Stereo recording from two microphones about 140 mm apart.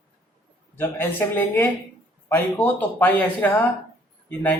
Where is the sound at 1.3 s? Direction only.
15° left (ahead or behind).